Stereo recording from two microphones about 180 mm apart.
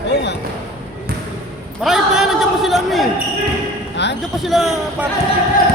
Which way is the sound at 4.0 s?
75° left (ahead or behind).